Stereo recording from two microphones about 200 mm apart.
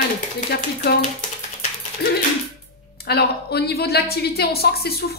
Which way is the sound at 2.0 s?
50° left (ahead or behind).